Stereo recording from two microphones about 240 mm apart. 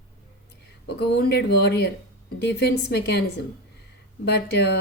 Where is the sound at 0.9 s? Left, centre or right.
Left.